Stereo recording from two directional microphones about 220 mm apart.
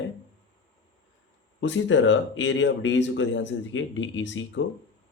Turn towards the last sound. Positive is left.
turn(degrees=55)  # may be behind; listen again after turning